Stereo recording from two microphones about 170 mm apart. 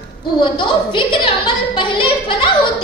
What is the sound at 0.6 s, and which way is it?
A woman's voice, 30° left (ahead or behind).